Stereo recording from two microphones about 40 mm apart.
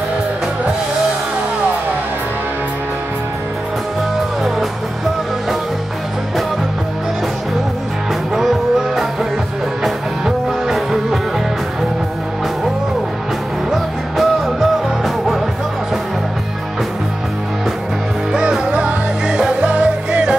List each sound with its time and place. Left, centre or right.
8.4 s music: centre
10.7 s music: centre
13.7 s music: centre
18.3 s music: right